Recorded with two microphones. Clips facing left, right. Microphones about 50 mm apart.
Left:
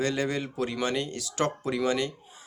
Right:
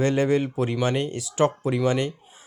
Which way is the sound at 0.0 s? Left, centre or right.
Right.